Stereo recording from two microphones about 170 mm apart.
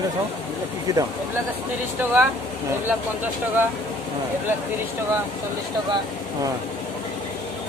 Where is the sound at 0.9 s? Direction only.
20° right (ahead or behind).